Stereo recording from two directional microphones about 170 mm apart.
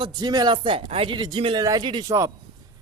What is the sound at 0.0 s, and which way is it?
Speech, 25° right (ahead or behind).